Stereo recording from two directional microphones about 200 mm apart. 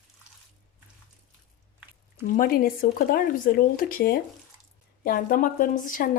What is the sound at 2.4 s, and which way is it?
A woman's voice, 45° left (ahead or behind).